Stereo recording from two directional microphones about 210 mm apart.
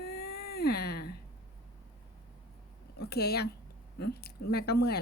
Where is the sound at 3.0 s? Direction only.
50° left (ahead or behind).